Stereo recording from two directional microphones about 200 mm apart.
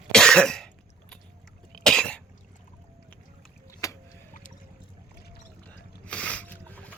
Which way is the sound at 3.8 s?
15° left (ahead or behind).